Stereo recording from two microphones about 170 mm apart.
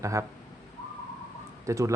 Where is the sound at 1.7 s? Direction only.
20° right (ahead or behind).